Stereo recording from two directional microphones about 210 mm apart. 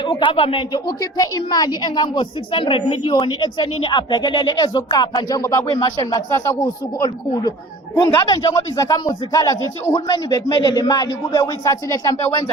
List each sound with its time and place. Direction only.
0.0 s speech: 25° left (ahead or behind)
7.9 s speech: 15° left (ahead or behind)